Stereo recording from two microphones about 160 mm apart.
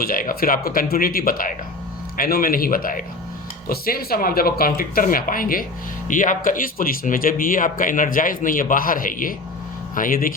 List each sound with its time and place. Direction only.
0.0 s speech: 65° left (ahead or behind)